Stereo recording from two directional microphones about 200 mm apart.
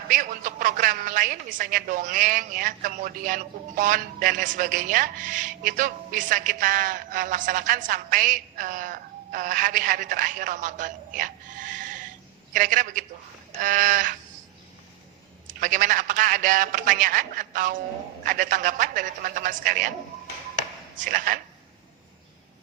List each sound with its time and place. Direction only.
0.1 s a man's voice: 40° right (ahead or behind)
15.6 s a man's voice: 40° right (ahead or behind)
21.0 s a man's voice: 40° right (ahead or behind)